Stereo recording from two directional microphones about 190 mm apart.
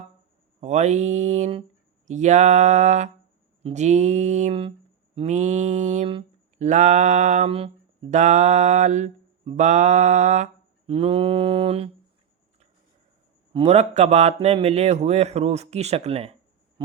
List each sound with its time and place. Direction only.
0.6 s a man's voice: 35° right (ahead or behind)
5.1 s mantra: 35° right (ahead or behind)
9.6 s a man's voice: 40° right (ahead or behind)
13.5 s a man's voice: 35° right (ahead or behind)